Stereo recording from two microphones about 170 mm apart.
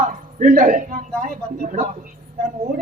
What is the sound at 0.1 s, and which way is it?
A woman's voice, 50° right (ahead or behind).